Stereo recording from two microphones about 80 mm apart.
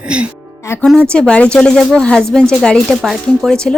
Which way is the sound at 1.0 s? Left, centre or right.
Centre.